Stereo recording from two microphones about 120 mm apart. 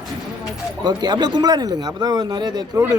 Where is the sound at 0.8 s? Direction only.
35° right (ahead or behind).